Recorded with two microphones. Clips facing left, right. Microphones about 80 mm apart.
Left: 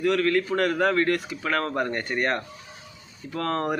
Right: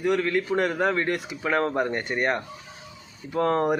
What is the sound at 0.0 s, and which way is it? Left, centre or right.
Speech, centre.